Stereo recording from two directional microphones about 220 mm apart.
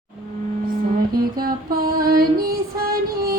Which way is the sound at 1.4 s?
40° right (ahead or behind).